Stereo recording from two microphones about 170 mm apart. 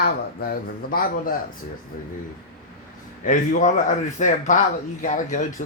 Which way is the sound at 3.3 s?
50° left (ahead or behind).